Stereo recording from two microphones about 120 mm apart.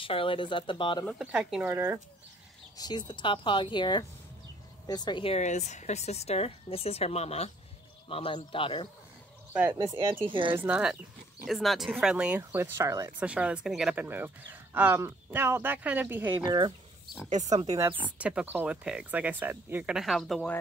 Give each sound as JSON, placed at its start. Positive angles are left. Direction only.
{"t": 0.0, "sound": "speech", "side_deg": 45}
{"t": 1.1, "sound": "speech", "side_deg": -10}
{"t": 2.8, "sound": "speech", "side_deg": 35}
{"t": 5.3, "sound": "speech", "side_deg": 75}
{"t": 8.1, "sound": "speech", "side_deg": 50}
{"t": 9.7, "sound": "speech", "side_deg": -35}
{"t": 10.6, "sound": "speech", "side_deg": -10}
{"t": 13.2, "sound": "speech", "side_deg": -10}
{"t": 14.0, "sound": "speech", "side_deg": -15}
{"t": 16.4, "sound": "speech", "side_deg": -40}
{"t": 17.9, "sound": "speech", "side_deg": -10}
{"t": 19.9, "sound": "speech", "side_deg": 0}